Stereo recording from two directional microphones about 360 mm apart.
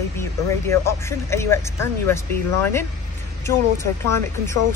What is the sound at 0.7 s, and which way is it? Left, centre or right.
Speech, centre.